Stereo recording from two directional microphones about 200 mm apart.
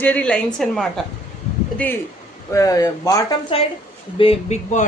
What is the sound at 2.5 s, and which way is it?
Speech, 15° left (ahead or behind).